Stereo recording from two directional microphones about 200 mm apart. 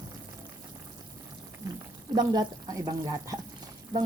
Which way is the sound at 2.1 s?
20° right (ahead or behind).